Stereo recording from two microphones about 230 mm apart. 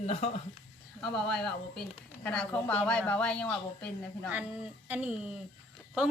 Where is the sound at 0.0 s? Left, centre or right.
Left.